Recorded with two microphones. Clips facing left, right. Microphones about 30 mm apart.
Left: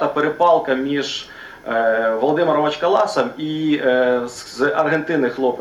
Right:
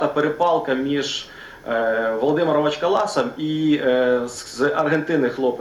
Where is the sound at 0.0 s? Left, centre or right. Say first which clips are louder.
Left 3 dB; centre.